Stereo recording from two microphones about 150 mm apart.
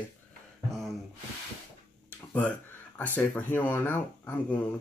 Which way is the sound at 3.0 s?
15° left (ahead or behind).